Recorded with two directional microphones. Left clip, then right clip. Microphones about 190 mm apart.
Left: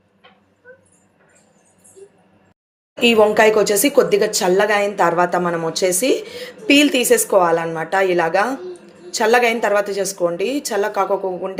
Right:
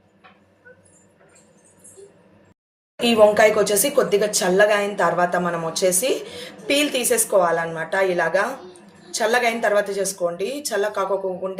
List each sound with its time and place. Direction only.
3.0 s speech: 40° left (ahead or behind)